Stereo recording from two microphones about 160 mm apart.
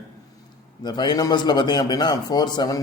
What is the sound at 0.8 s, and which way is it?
A man's voice, 25° left (ahead or behind).